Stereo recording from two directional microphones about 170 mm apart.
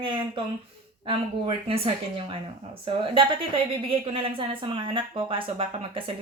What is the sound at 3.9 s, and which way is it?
Speech, 35° right (ahead or behind).